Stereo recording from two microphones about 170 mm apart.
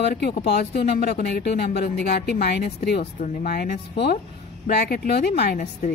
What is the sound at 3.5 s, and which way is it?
Speech, 65° left (ahead or behind).